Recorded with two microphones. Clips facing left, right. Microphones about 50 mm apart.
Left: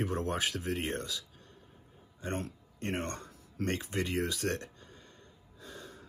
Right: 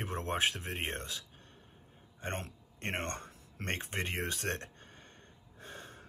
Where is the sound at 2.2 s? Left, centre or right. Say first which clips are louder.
Left 3 dB; right.